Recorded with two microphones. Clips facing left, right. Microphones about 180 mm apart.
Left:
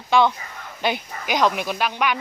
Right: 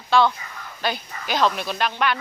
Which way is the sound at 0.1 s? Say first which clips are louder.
Left 1 dB; 15° left (ahead or behind).